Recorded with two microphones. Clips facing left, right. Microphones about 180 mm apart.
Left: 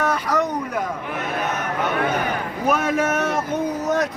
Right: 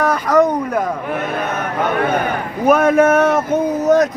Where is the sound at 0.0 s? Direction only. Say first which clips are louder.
Right 7 dB; 45° right (ahead or behind).